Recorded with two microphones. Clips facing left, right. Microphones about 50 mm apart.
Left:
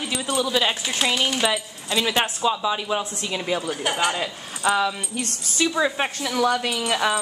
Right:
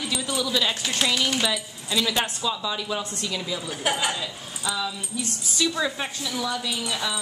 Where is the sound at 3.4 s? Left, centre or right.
Left.